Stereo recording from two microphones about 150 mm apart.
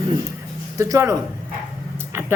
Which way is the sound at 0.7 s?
20° right (ahead or behind).